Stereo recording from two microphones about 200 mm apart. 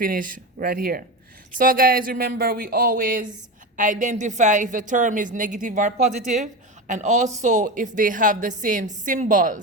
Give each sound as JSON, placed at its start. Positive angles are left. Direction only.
{"t": 0.0, "sound": "a woman's voice", "side_deg": -45}